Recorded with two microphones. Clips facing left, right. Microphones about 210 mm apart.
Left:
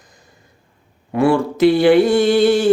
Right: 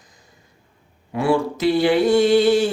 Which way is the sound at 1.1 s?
55° left (ahead or behind).